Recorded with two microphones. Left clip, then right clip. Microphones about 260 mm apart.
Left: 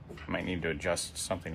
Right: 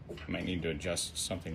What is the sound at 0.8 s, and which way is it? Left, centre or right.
Speech, centre.